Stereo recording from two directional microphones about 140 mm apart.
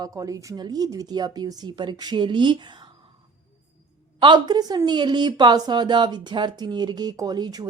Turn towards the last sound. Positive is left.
turn(degrees=-30)  # may be behind; listen again after turning